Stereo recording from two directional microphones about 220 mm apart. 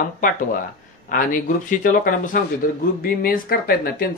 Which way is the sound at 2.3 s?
40° left (ahead or behind).